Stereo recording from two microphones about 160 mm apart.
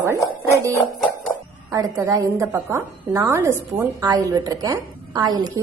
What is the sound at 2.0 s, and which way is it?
A woman's voice, 20° right (ahead or behind).